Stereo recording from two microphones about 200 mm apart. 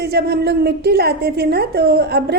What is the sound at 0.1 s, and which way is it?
A woman's voice, 55° right (ahead or behind).